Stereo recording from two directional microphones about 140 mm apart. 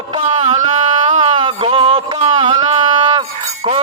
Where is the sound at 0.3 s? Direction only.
50° right (ahead or behind).